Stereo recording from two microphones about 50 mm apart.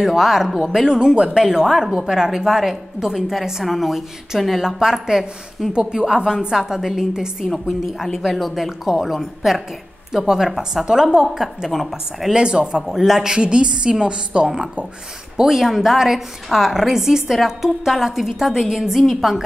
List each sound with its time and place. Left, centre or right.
0.0 s a woman's voice: centre
0.8 s a woman's voice: centre
1.4 s a woman's voice: centre
12.4 s a woman's voice: centre
12.8 s a woman's voice: centre
15.4 s a woman's voice: centre